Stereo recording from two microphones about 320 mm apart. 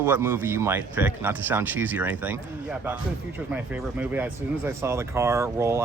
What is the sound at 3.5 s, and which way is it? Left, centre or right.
Speech, centre.